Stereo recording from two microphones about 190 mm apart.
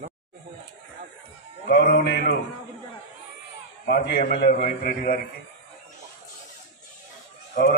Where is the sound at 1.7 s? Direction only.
55° left (ahead or behind).